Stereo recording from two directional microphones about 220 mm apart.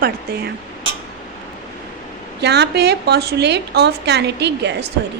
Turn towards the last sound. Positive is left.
turn(degrees=-50)  # may be behind; listen again after turning